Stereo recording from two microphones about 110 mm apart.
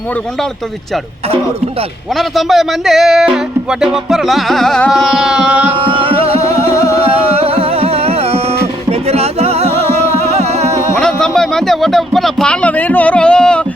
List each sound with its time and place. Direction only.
2.1 s speech: centre (ahead or behind)
5.7 s music: 50° right (ahead or behind); by 10.7 s 80° right
11.0 s a sound: 5° left (ahead or behind)